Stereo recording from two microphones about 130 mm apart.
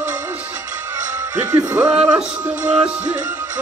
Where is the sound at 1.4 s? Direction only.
30° right (ahead or behind).